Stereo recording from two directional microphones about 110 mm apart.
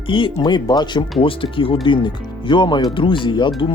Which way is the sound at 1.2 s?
50° left (ahead or behind).